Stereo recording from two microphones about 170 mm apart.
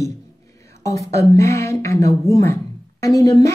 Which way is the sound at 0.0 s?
20° left (ahead or behind).